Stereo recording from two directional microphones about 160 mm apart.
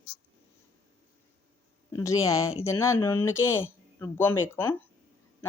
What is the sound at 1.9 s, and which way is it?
Speech, 20° left (ahead or behind).